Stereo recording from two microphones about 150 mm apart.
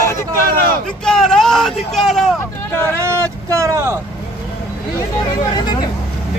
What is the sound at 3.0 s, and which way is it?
Vehicle, 20° right (ahead or behind).